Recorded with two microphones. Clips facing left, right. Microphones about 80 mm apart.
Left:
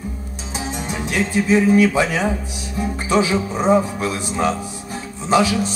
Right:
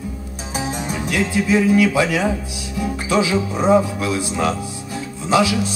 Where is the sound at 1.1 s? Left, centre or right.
Left.